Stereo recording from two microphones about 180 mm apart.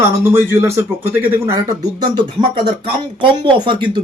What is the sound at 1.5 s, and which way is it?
Speech, 25° right (ahead or behind).